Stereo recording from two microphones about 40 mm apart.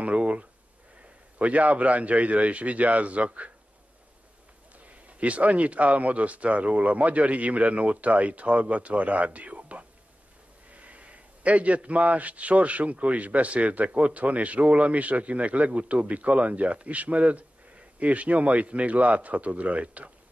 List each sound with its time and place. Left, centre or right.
0.0 s a sound: right
1.4 s speech: right
4.7 s speech: right